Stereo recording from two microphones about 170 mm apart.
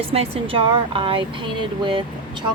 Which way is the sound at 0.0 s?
35° right (ahead or behind).